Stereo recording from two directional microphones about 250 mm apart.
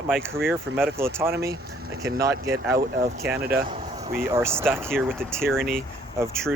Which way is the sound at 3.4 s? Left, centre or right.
Right.